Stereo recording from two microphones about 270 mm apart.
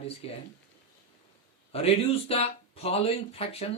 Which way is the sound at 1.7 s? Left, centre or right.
Left.